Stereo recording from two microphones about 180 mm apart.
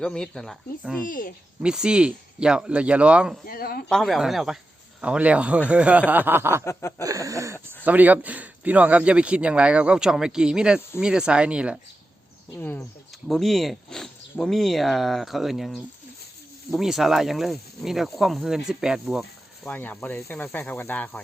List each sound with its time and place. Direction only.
0.0 s speech: 5° left (ahead or behind)
1.0 s speech: 50° left (ahead or behind)
1.6 s speech: 5° right (ahead or behind)
3.4 s speech: 55° left (ahead or behind)
3.8 s speech: centre (ahead or behind)
7.0 s a sound: 20° right (ahead or behind)
7.9 s speech: 10° right (ahead or behind)
12.5 s speech: 10° left (ahead or behind)
13.2 s speech: centre (ahead or behind)
19.6 s speech: 10° left (ahead or behind)